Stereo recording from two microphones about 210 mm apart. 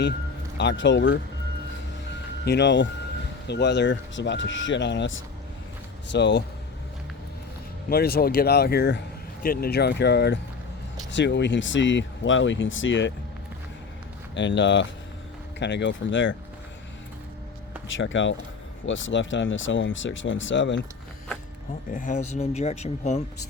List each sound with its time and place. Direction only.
0.5 s speech: 55° left (ahead or behind)
2.4 s speech: 55° left (ahead or behind)
7.9 s speech: 45° left (ahead or behind)
14.3 s speech: 60° left (ahead or behind)
17.9 s speech: 65° left (ahead or behind)
21.9 s speech: 35° left (ahead or behind)